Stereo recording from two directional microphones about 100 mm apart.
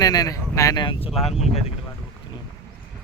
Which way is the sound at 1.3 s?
90° left.